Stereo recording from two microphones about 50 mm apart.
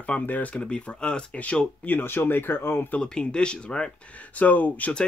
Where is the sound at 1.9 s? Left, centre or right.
Left.